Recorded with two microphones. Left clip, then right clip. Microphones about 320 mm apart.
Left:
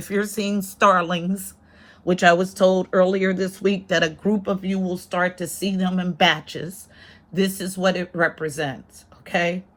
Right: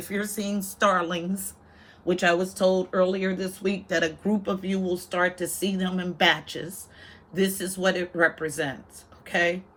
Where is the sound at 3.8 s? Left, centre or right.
Centre.